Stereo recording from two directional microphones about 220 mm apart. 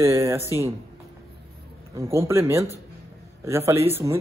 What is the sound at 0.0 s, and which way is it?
Speech, 15° right (ahead or behind).